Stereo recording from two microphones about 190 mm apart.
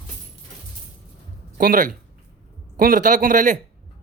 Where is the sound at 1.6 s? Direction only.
45° right (ahead or behind).